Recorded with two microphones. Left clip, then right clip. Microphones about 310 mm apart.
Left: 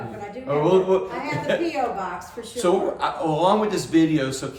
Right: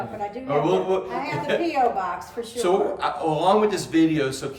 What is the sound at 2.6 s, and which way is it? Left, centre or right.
Speech, centre.